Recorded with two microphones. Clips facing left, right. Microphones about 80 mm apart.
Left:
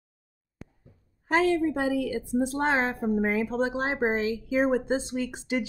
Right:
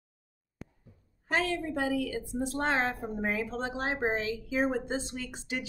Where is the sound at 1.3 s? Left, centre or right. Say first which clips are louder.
Left 7 dB; centre.